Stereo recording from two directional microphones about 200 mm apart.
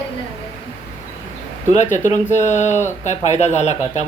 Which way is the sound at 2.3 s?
35° left (ahead or behind).